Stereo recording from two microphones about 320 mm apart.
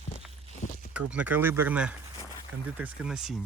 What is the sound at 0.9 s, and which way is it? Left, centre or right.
Speech, centre.